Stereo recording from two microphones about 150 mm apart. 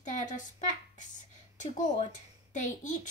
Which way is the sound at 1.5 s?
55° left (ahead or behind).